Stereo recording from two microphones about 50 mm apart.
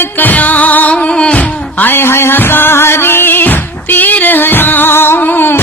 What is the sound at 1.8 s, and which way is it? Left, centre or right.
Music, left.